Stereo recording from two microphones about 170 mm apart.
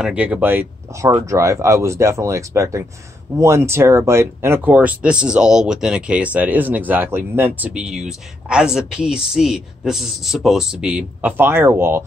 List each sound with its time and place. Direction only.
0.0 s speech: 10° right (ahead or behind)